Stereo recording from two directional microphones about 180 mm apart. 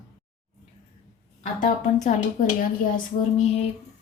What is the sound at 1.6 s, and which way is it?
A woman's voice, 40° left (ahead or behind).